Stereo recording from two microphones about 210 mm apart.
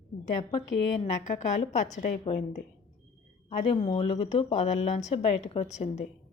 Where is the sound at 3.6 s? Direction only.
30° left (ahead or behind).